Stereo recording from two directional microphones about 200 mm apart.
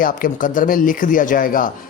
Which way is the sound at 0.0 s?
45° left (ahead or behind).